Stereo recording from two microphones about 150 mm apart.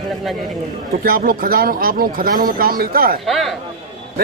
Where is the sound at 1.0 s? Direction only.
75° right (ahead or behind).